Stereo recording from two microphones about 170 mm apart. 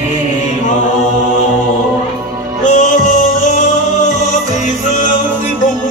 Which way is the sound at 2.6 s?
45° left (ahead or behind).